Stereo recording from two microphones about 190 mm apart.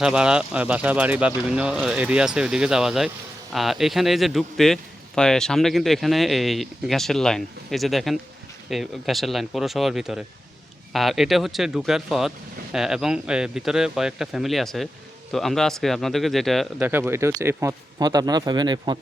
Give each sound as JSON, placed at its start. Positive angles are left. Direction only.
{"t": 0.0, "sound": "a man's voice", "side_deg": -5}
{"t": 16.8, "sound": "speech", "side_deg": -10}